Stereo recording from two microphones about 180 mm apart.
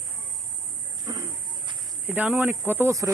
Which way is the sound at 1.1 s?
25° right (ahead or behind).